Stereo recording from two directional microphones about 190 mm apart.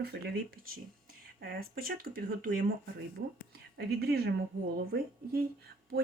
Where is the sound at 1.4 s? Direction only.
50° right (ahead or behind).